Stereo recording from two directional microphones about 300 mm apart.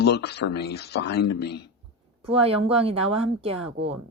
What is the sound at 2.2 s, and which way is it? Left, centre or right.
A woman's voice, centre.